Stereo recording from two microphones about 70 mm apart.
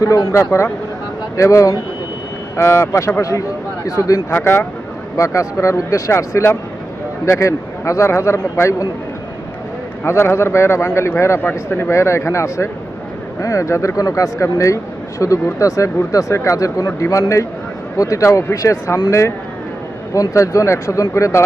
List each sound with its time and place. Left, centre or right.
0.0 s a man's voice: left
0.3 s speech: left
2.6 s a man's voice: left
4.3 s a man's voice: left
5.1 s speech: left
10.0 s a man's voice: left
20.1 s speech: left